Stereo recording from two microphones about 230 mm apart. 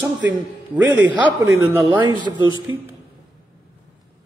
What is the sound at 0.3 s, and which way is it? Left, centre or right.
A man's voice, centre.